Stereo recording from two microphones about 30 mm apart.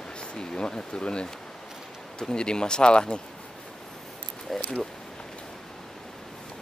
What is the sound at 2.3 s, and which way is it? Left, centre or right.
Speech, left.